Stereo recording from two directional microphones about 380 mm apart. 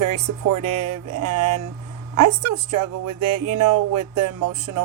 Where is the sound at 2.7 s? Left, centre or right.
Right.